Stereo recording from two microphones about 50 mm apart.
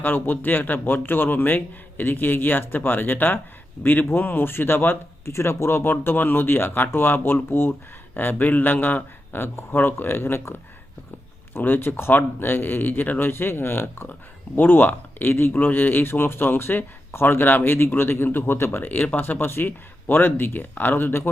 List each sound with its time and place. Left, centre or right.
0.0 s a man's voice: left
5.2 s a man's voice: left
11.5 s speech: left
18.9 s speech: left